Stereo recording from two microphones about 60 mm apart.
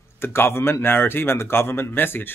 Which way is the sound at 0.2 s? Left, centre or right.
Left.